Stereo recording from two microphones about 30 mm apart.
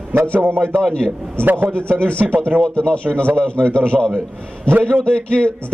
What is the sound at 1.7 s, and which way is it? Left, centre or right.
A man's voice, left.